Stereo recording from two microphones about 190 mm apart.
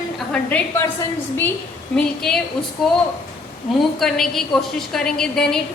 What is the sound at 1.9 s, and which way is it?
A woman's voice, 5° left (ahead or behind).